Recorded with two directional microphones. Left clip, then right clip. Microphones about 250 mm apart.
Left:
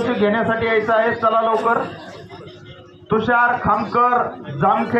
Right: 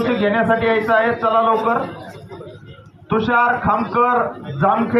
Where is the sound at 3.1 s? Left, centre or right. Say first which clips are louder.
Even; centre.